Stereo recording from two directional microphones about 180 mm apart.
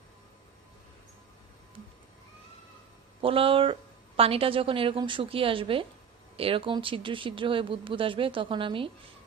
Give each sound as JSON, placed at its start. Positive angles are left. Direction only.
{"t": 3.2, "sound": "a woman's voice", "side_deg": -30}